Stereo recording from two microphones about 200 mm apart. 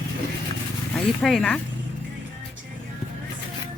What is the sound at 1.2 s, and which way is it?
Speech, centre (ahead or behind).